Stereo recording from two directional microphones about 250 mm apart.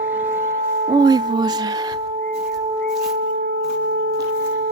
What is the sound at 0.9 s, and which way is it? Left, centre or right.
Speech, centre.